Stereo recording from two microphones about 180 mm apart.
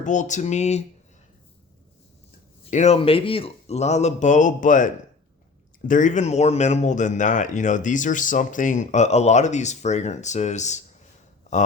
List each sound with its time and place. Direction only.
0.0 s speech: 45° left (ahead or behind)
2.6 s speech: 40° left (ahead or behind)
5.9 s speech: 45° left (ahead or behind)